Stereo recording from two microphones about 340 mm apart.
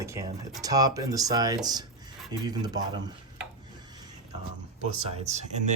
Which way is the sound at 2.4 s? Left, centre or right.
Centre.